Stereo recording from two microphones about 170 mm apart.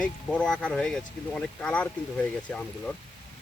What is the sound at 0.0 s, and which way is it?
Speech, 5° left (ahead or behind).